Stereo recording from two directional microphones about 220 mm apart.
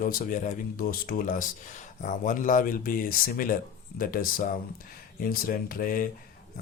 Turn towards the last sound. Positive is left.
turn(degrees=40)  # may be behind; listen again after turning